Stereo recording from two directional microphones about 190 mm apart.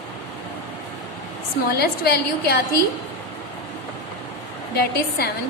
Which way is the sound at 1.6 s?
55° left (ahead or behind).